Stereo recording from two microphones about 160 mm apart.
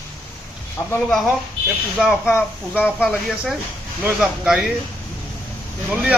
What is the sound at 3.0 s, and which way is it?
Speech, 5° right (ahead or behind).